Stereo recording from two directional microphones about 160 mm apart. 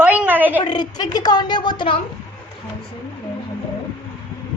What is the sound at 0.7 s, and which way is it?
A woman's voice, 25° left (ahead or behind).